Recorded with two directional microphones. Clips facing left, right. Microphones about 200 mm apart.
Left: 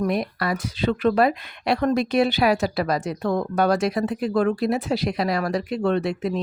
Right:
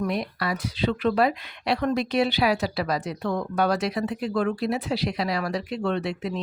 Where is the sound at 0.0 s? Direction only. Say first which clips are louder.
Left 3 dB; 50° left (ahead or behind).